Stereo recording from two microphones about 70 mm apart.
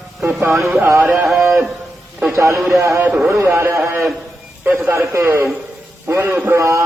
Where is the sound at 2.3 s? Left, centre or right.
Right.